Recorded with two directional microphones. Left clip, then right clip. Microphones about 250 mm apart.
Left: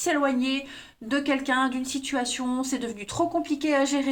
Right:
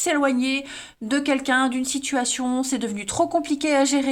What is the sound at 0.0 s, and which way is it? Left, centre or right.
A woman's voice, right.